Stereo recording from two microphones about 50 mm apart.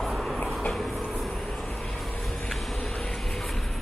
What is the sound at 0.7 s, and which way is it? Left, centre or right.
Train, centre.